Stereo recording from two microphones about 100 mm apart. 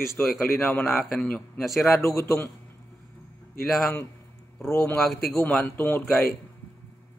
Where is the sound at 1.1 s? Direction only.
10° left (ahead or behind).